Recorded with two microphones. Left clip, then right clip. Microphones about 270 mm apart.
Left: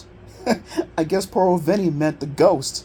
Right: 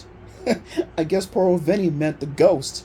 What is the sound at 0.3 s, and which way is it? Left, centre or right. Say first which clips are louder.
Speech: left 1 dB; left.